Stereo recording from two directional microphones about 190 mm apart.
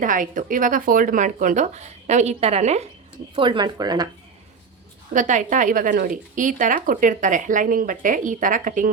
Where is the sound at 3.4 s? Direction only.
25° right (ahead or behind).